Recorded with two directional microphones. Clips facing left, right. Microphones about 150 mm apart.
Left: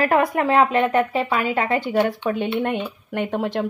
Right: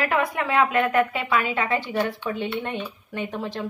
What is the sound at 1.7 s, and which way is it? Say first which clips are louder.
A woman's voice: left 5 dB; 50° left (ahead or behind).